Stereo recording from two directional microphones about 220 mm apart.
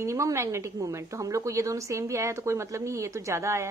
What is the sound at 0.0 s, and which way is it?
Speech, 15° right (ahead or behind).